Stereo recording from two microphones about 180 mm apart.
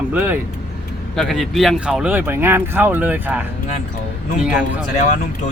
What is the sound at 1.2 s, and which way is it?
Speech, centre (ahead or behind).